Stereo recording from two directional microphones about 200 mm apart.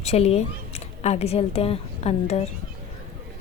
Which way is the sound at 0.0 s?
30° left (ahead or behind).